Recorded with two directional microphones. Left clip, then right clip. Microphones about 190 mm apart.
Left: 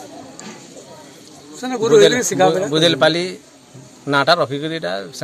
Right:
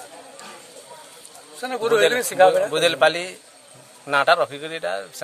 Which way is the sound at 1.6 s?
45° right (ahead or behind).